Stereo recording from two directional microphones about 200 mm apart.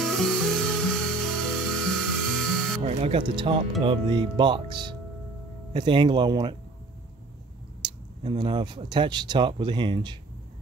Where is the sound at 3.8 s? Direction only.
25° right (ahead or behind).